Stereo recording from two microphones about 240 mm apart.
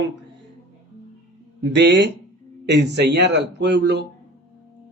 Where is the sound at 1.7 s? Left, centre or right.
Right.